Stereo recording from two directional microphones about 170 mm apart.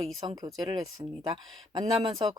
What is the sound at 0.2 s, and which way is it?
Speech, 30° right (ahead or behind).